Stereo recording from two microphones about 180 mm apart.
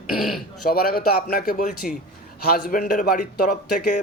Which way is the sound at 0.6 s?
55° left (ahead or behind).